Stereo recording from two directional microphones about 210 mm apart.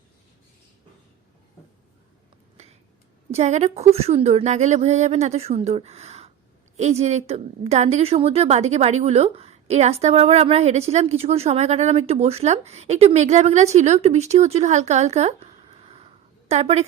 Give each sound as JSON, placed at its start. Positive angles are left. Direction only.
{"t": 3.3, "sound": "a woman's voice", "side_deg": -30}